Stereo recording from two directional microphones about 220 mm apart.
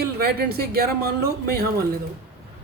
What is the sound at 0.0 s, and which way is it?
Speech, 45° right (ahead or behind).